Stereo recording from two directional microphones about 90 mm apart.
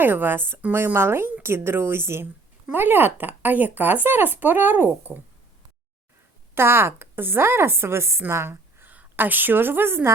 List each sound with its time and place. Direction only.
0.0 s speech: 20° right (ahead or behind)
6.5 s a woman's voice: 25° right (ahead or behind)